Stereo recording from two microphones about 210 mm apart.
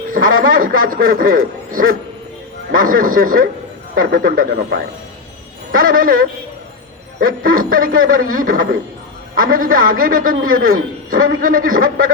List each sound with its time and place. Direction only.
0.1 s a man's voice: 40° right (ahead or behind)